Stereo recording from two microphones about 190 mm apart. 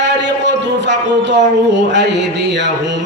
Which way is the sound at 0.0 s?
70° right (ahead or behind).